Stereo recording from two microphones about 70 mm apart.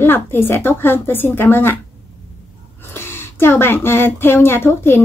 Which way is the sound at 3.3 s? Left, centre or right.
Left.